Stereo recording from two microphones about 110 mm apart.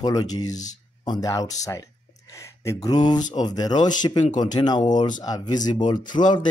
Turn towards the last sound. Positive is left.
turn(degrees=40)  # may be behind; listen again after turning